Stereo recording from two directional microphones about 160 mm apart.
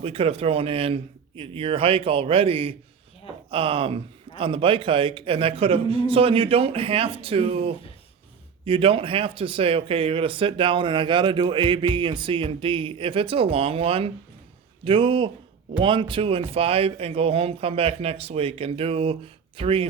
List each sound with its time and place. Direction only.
0.0 s a man's voice: 35° right (ahead or behind)